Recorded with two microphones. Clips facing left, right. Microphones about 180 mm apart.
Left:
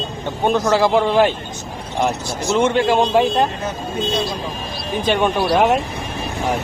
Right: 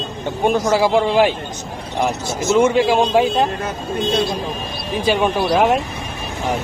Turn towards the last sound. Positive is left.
turn(degrees=0)  # may be behind; listen again after turning